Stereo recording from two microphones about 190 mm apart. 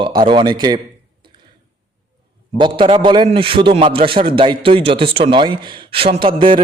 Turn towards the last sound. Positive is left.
turn(degrees=-25)  # may be behind; listen again after turning